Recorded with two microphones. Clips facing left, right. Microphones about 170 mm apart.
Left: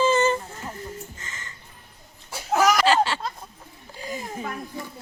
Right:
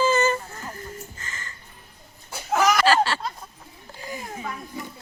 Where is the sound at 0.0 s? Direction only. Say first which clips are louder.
Left 1 dB; 25° left (ahead or behind).